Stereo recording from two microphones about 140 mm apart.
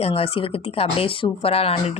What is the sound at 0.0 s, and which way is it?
Speech, 40° left (ahead or behind).